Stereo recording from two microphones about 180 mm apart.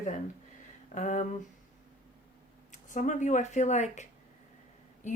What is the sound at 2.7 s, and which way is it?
Speech, 45° left (ahead or behind).